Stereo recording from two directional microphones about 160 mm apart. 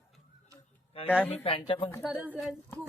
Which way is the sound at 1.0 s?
35° left (ahead or behind).